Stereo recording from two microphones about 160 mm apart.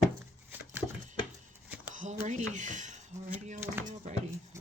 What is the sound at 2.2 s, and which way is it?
Speech, 50° right (ahead or behind).